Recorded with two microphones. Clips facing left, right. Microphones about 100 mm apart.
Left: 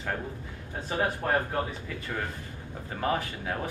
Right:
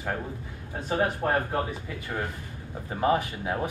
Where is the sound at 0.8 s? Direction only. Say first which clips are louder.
Right 3 dB; 20° right (ahead or behind).